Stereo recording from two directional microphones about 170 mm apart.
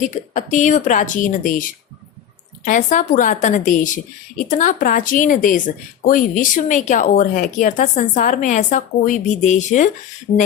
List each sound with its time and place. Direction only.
0.0 s a woman's voice: 45° left (ahead or behind)